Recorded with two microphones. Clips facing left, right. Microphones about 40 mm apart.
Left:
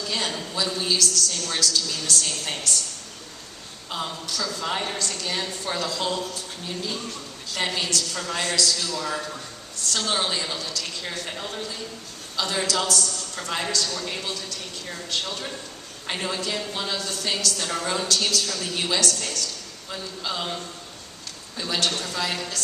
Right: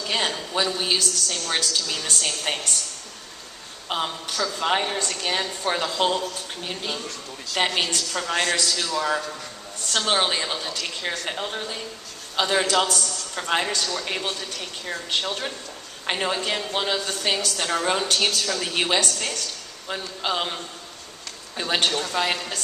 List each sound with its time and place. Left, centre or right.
0.0 s a woman's voice: right
3.8 s a woman's voice: right